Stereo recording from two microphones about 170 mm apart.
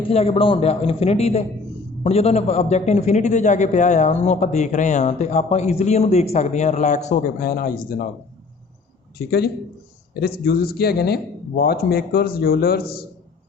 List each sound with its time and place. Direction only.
0.0 s a man's voice: 35° left (ahead or behind); by 8.0 s 60° left (ahead or behind)
9.1 s a man's voice: 70° left (ahead or behind)